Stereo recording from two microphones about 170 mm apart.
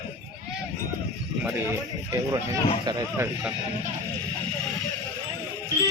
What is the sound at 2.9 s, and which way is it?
Speech, 15° right (ahead or behind).